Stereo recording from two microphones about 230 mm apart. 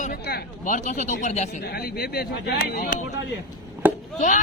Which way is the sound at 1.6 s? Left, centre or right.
Left.